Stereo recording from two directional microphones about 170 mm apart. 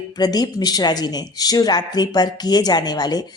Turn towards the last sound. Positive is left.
turn(degrees=25)  # may be behind; listen again after turning